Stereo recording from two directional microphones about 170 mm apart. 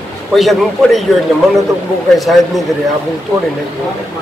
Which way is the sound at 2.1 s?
Centre (ahead or behind).